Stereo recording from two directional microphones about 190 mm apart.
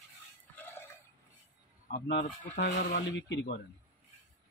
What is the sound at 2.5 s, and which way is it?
Speech, 50° left (ahead or behind).